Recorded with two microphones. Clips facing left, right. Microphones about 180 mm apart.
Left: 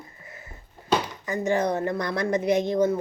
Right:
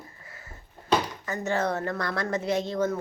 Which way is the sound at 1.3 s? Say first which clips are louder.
Left 4 dB; 15° left (ahead or behind).